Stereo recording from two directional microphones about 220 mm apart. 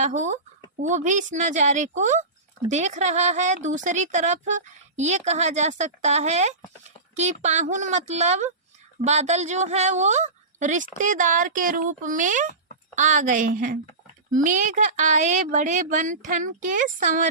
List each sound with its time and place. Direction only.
0.0 s speech: 30° right (ahead or behind)